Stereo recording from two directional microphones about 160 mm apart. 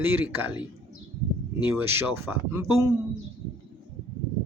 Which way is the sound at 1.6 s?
15° right (ahead or behind).